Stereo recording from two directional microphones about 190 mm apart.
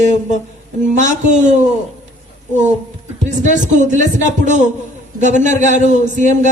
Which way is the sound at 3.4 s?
40° right (ahead or behind).